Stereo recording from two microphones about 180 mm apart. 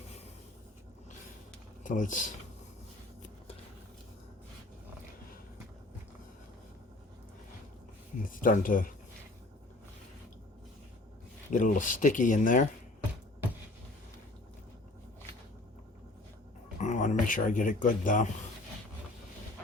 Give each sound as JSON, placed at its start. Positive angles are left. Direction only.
{"t": 1.8, "sound": "speech", "side_deg": 45}
{"t": 8.3, "sound": "speech", "side_deg": 50}
{"t": 11.5, "sound": "speech", "side_deg": 45}
{"t": 16.8, "sound": "speech", "side_deg": 40}